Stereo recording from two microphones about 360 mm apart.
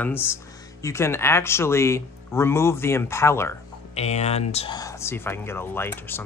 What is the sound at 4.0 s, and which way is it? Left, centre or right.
Speech, centre.